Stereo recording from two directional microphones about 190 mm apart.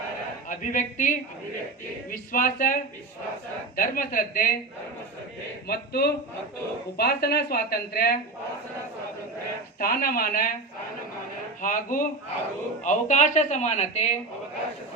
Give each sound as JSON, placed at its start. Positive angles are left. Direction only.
{"t": 0.4, "sound": "a woman's voice", "side_deg": 45}
{"t": 3.8, "sound": "a woman's voice", "side_deg": 50}
{"t": 5.6, "sound": "a woman's voice", "side_deg": 55}
{"t": 9.7, "sound": "a woman's voice", "side_deg": 50}
{"t": 11.6, "sound": "a woman's voice", "side_deg": 45}